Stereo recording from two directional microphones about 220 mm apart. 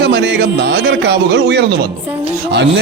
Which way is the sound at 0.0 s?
50° right (ahead or behind).